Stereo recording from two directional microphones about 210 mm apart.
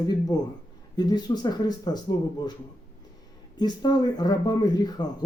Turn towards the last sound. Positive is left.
turn(degrees=20)  # may be behind; listen again after turning